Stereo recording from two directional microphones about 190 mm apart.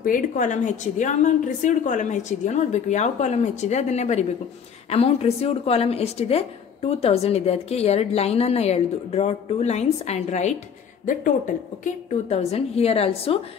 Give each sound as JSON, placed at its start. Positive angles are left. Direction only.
{"t": 0.0, "sound": "a woman's voice", "side_deg": 45}
{"t": 11.8, "sound": "a woman's voice", "side_deg": 35}